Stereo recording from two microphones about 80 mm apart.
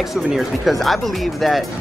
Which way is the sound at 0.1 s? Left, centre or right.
Centre.